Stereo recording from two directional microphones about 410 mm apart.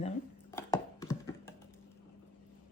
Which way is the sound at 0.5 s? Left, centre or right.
Centre.